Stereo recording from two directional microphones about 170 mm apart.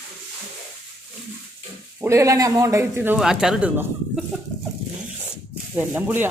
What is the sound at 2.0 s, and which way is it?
Speech, 15° right (ahead or behind).